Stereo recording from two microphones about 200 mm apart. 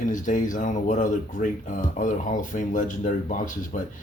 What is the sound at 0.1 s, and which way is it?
Speech, 40° left (ahead or behind).